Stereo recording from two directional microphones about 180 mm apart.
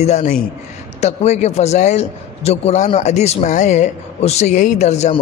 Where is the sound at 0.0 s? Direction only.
40° left (ahead or behind).